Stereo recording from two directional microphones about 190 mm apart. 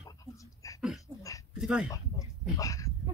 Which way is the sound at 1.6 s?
5° right (ahead or behind).